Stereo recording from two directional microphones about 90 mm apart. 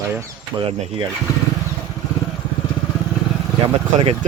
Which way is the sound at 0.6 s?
70° right (ahead or behind).